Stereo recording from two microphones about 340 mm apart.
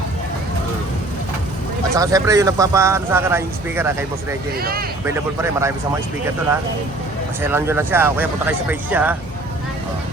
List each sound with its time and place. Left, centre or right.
2.0 s speech: centre
4.5 s speech: right
5.0 s speech: centre
7.4 s speech: centre